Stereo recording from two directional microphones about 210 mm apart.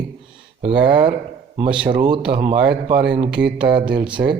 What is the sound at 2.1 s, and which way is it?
Speech, 25° right (ahead or behind).